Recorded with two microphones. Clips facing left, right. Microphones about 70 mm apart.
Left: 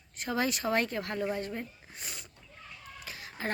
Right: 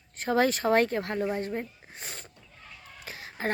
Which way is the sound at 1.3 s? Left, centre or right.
Right.